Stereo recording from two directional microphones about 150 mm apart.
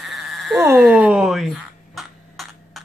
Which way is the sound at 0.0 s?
Centre (ahead or behind).